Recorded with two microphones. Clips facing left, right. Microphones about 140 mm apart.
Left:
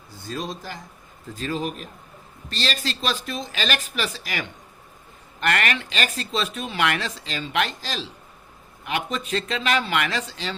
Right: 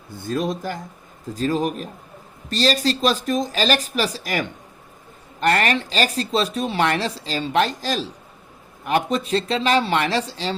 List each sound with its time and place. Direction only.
0.1 s speech: 55° right (ahead or behind)
1.3 s speech: 40° right (ahead or behind)